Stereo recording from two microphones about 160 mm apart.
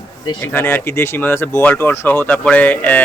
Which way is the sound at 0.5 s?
15° left (ahead or behind).